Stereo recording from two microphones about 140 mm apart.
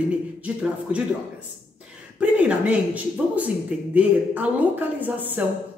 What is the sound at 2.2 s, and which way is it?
Speech, 10° right (ahead or behind).